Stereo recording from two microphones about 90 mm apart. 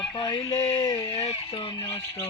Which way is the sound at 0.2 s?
70° left (ahead or behind).